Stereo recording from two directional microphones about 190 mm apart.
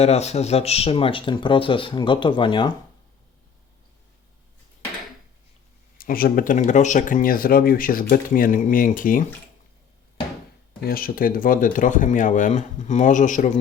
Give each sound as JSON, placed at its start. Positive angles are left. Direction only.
{"t": 0.0, "sound": "speech", "side_deg": 35}
{"t": 6.0, "sound": "speech", "side_deg": 50}
{"t": 10.8, "sound": "speech", "side_deg": 50}